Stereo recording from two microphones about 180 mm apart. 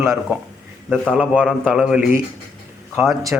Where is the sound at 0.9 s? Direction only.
5° left (ahead or behind).